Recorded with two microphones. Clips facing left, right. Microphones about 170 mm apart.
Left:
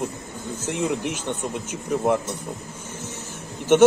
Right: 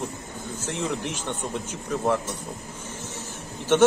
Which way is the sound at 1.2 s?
15° left (ahead or behind).